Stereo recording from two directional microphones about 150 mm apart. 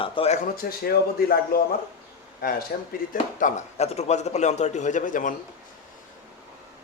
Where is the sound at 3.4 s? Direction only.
45° left (ahead or behind).